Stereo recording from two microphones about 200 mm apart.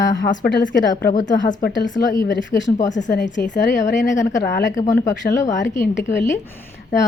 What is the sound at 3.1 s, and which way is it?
Speech, 60° left (ahead or behind).